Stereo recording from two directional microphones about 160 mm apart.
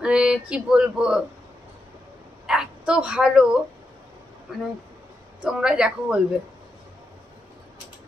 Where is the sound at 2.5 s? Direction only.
5° right (ahead or behind).